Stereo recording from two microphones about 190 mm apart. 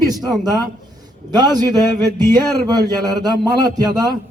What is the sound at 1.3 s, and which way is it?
Speech, 20° right (ahead or behind).